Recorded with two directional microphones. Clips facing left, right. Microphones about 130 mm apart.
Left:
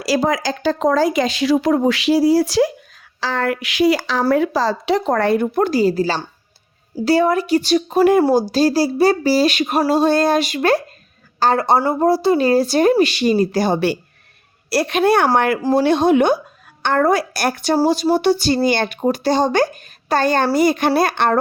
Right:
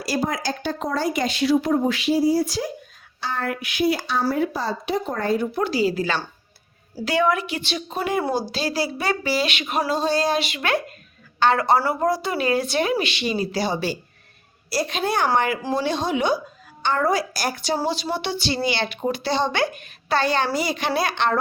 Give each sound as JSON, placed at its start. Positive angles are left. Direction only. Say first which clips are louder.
{"t": 0.0, "sound": "a woman's voice", "louder": "left 7 dB", "side_deg": 90}
{"t": 17.7, "sound": "speech", "louder": "left 9 dB", "side_deg": 45}